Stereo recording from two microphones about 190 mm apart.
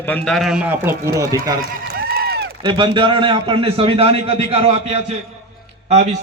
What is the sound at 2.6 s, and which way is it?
A man's voice, 25° right (ahead or behind).